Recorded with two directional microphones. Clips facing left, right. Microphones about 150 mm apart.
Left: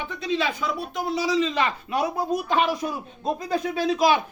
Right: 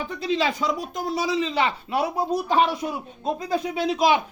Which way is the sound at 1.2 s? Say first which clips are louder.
Even; 25° right (ahead or behind).